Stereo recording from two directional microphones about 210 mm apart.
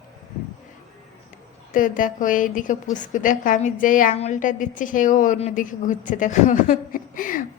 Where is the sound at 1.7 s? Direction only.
40° left (ahead or behind).